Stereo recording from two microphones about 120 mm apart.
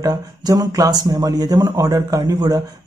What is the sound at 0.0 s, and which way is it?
Speech, 30° right (ahead or behind).